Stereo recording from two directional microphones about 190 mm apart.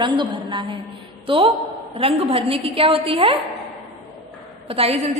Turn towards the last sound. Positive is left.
turn(degrees=-30)  # may be behind; listen again after turning